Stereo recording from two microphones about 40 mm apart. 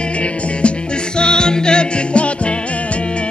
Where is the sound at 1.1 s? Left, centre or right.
Left.